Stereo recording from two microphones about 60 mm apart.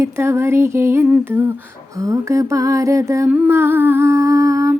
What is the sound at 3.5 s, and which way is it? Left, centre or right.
Humming, right.